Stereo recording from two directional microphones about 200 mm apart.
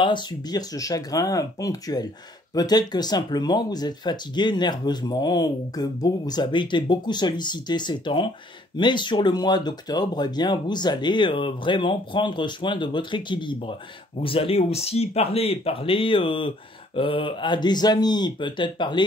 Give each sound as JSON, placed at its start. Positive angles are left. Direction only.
{"t": 0.0, "sound": "speech", "side_deg": 20}